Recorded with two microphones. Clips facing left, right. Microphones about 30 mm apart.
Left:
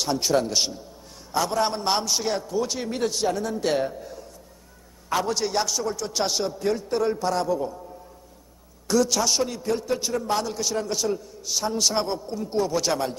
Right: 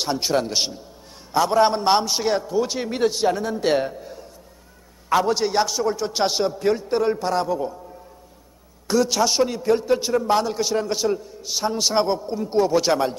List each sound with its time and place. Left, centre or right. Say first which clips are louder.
0.0 s a man's voice: right 1 dB; right
8.8 s a man's voice: right 2 dB; centre